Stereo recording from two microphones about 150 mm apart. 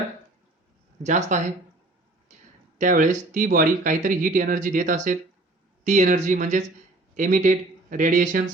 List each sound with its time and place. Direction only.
1.0 s speech: 55° right (ahead or behind)
2.7 s speech: 60° right (ahead or behind)